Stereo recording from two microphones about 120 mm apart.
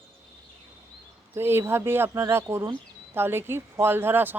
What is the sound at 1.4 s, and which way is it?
Speech, 20° right (ahead or behind).